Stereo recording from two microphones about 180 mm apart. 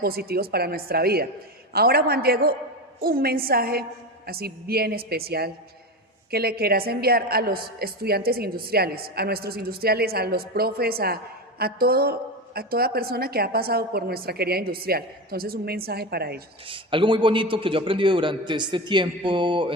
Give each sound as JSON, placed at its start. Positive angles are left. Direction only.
{"t": 0.0, "sound": "a woman's voice", "side_deg": -60}
{"t": 16.6, "sound": "a man's voice", "side_deg": -30}